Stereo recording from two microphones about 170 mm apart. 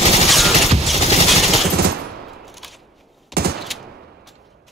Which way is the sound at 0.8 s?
Centre (ahead or behind).